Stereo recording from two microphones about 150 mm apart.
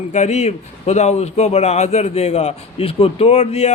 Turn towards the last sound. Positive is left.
turn(degrees=45)  # may be behind; listen again after turning